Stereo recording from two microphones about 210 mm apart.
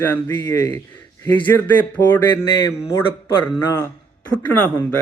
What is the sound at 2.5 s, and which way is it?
Speech, 20° left (ahead or behind).